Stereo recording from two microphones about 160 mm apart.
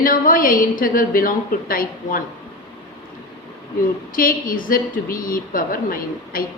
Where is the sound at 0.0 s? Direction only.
60° left (ahead or behind).